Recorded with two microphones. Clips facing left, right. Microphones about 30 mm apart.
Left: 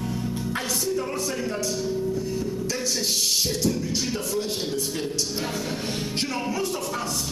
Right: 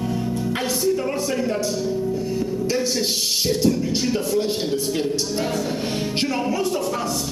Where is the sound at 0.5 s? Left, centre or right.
Centre.